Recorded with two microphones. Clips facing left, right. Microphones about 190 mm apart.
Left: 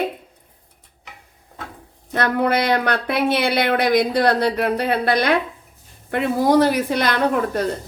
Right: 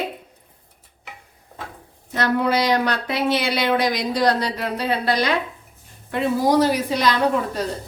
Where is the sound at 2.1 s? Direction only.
55° left (ahead or behind).